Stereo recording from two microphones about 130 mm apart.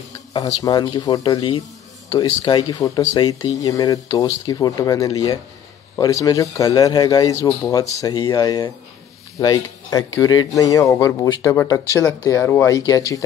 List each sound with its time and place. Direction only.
0.3 s speech: 25° left (ahead or behind)
1.3 s speech: 40° left (ahead or behind)
2.0 s speech: 30° left (ahead or behind)